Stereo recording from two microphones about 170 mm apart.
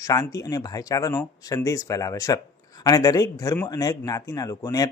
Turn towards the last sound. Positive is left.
turn(degrees=20)  # may be behind; listen again after turning